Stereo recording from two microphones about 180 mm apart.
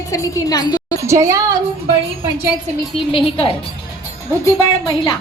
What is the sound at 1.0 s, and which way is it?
Speech, 15° right (ahead or behind).